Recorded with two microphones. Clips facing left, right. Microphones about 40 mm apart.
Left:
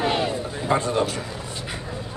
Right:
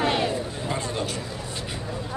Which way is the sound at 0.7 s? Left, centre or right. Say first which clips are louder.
Left 9 dB; left.